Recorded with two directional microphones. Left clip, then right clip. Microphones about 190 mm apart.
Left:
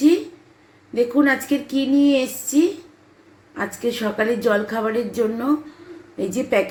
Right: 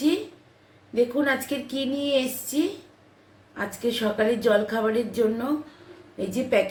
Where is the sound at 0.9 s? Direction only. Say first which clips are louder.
Left 5 dB; 25° left (ahead or behind).